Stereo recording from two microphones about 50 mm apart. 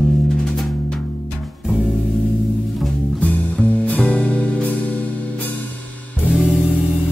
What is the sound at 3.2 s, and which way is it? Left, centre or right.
Music, left.